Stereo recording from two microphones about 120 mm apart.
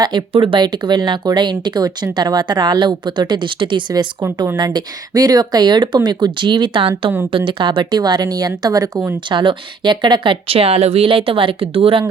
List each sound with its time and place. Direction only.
0.0 s speech: 35° right (ahead or behind)
9.3 s speech: 40° right (ahead or behind)